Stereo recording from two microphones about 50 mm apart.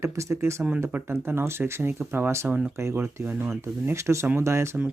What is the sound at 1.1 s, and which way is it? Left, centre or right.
Speech, right.